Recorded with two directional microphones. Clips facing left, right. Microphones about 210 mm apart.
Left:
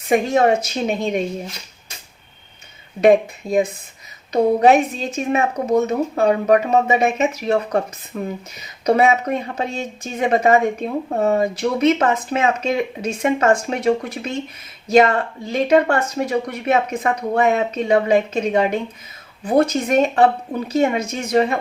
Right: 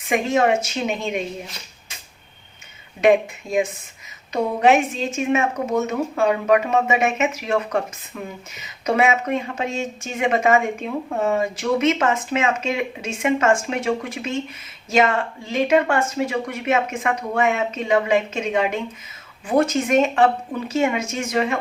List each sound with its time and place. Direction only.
0.1 s a woman's voice: 35° left (ahead or behind)
3.0 s a woman's voice: 35° left (ahead or behind)